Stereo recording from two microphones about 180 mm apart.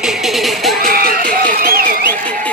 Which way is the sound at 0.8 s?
55° right (ahead or behind).